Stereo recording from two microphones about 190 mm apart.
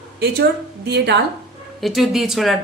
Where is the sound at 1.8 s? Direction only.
Centre (ahead or behind).